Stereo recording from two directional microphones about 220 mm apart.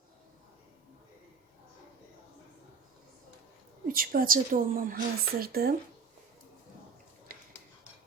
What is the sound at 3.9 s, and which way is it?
A woman's voice, 40° right (ahead or behind).